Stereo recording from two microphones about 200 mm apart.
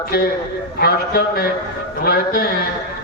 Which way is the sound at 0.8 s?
50° left (ahead or behind).